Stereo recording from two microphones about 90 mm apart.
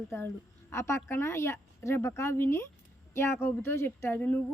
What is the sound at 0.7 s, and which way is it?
A woman's voice, 30° left (ahead or behind).